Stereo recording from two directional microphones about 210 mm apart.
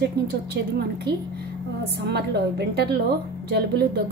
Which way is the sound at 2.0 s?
50° right (ahead or behind).